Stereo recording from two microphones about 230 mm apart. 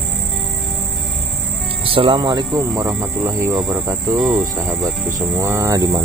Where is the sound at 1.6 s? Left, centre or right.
Right.